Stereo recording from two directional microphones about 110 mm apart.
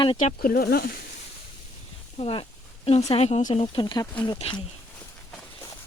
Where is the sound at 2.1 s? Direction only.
60° left (ahead or behind).